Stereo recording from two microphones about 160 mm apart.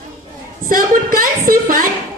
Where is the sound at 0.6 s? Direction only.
60° right (ahead or behind).